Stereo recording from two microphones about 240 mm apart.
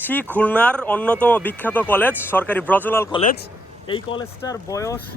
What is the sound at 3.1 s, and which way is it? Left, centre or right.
A man's voice, left.